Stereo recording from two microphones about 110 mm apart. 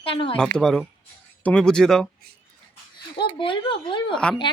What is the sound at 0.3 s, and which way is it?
Speech, 5° left (ahead or behind).